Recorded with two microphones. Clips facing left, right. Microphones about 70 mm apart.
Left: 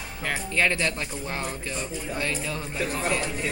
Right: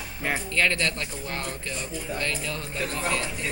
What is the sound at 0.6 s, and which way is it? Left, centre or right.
Speech, centre.